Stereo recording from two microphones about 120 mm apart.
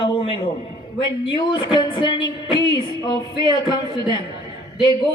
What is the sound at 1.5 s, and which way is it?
Music, 40° left (ahead or behind).